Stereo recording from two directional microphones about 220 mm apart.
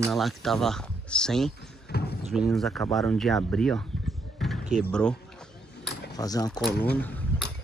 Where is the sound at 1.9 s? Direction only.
45° left (ahead or behind).